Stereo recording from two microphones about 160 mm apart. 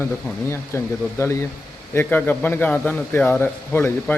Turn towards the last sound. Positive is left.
turn(degrees=15)  # may be behind; listen again after turning